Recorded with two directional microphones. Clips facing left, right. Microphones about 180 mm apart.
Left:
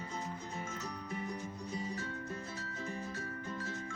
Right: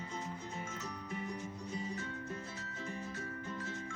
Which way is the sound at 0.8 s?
35° left (ahead or behind).